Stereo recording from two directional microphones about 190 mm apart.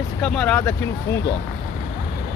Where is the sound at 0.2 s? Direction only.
5° left (ahead or behind).